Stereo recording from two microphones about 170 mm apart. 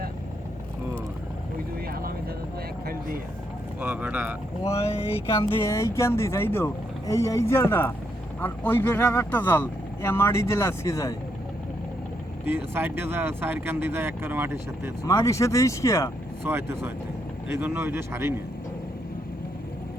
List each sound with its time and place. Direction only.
1.9 s vehicle: 60° right (ahead or behind)
3.8 s speech: 10° right (ahead or behind)
4.6 s speech: 15° left (ahead or behind)
12.5 s speech: 15° right (ahead or behind)
15.0 s speech: 20° left (ahead or behind)
16.4 s speech: 15° right (ahead or behind)